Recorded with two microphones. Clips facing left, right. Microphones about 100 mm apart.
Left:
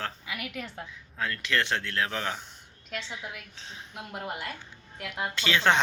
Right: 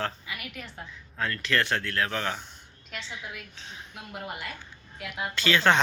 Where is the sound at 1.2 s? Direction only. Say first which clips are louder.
Right 1 dB; 10° left (ahead or behind).